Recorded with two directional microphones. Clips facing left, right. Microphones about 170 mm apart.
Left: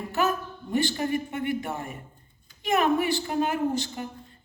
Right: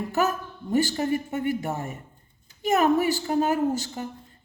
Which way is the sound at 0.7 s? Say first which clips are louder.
Right 2 dB; 40° right (ahead or behind).